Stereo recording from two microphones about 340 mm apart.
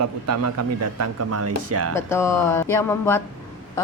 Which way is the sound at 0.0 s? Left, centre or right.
Right.